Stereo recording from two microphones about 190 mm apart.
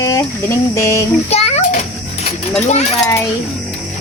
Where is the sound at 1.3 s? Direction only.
35° left (ahead or behind).